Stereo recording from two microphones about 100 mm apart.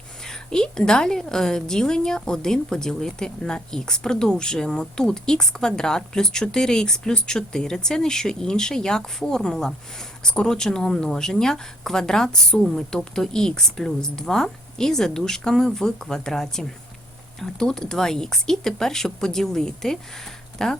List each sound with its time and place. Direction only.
0.2 s speech: 5° left (ahead or behind)